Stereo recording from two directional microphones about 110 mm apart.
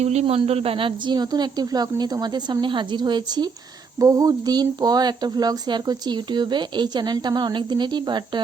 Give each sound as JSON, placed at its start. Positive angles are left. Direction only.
{"t": 0.0, "sound": "speech", "side_deg": -80}